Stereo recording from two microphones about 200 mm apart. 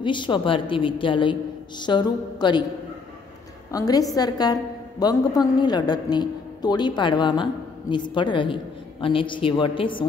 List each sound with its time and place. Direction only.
0.0 s a woman's voice: 25° left (ahead or behind)
3.7 s a woman's voice: 20° left (ahead or behind)